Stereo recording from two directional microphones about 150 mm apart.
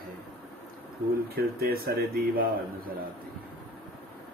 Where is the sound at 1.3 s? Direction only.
90° right.